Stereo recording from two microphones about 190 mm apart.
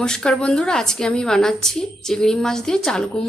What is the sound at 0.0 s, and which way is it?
Speech, 5° left (ahead or behind).